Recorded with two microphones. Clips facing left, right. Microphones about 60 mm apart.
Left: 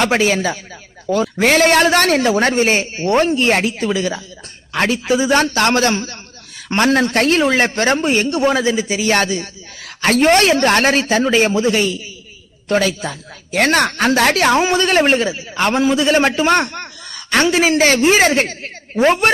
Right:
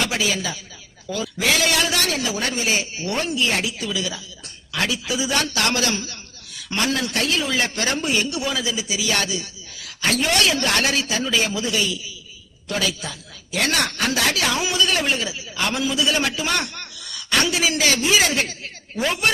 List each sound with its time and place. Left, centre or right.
0.0 s a man's voice: left